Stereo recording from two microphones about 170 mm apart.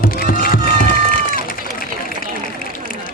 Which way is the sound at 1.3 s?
55° left (ahead or behind).